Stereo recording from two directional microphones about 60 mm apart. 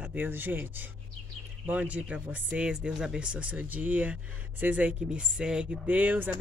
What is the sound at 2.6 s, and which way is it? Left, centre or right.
Speech, centre.